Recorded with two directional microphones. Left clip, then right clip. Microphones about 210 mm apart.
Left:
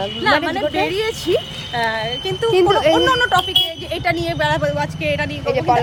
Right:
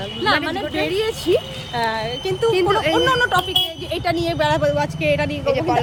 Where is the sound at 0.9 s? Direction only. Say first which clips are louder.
Even; 15° right (ahead or behind).